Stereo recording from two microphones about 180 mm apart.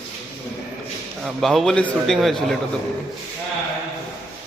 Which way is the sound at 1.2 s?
Centre (ahead or behind).